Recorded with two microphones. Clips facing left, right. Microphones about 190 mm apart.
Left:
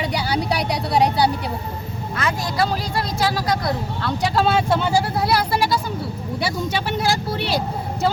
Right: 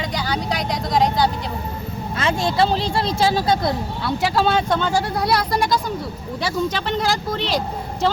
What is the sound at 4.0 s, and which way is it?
Speech, centre (ahead or behind).